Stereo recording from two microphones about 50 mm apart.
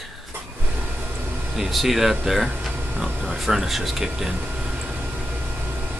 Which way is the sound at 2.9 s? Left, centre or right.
Right.